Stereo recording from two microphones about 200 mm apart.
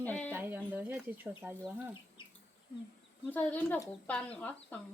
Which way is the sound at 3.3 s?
10° left (ahead or behind).